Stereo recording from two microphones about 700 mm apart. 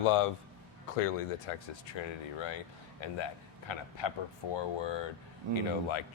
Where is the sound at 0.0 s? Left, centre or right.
Left.